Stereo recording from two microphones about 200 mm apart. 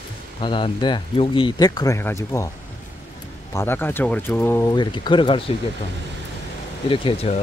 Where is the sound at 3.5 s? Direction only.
10° left (ahead or behind).